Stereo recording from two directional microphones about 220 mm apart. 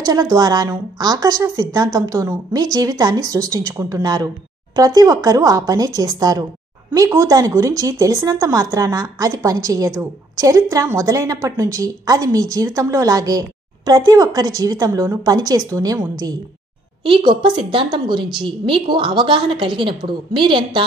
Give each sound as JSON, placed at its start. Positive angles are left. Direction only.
{"t": 0.0, "sound": "a woman's voice", "side_deg": -15}